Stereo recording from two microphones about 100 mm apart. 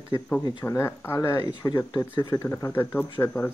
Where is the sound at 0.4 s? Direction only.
40° left (ahead or behind).